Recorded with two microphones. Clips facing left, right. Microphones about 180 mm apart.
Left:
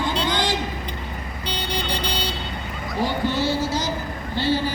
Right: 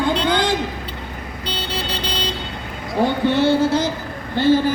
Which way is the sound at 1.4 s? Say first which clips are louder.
Right 1 dB; 10° left (ahead or behind).